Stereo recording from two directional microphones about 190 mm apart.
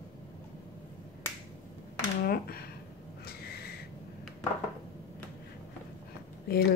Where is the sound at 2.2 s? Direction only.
50° left (ahead or behind).